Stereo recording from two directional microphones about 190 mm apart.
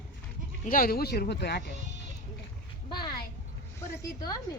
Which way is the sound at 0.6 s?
50° left (ahead or behind).